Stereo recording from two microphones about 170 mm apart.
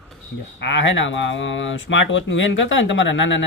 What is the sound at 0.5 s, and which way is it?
Speech, 90° left.